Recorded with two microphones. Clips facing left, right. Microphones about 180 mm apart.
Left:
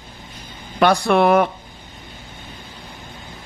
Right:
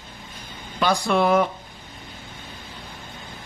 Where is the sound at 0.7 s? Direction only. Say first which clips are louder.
Left 5 dB; 65° left (ahead or behind).